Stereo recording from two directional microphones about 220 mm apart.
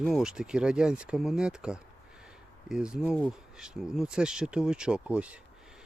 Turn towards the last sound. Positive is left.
turn(degrees=-5)  # may be behind; listen again after turning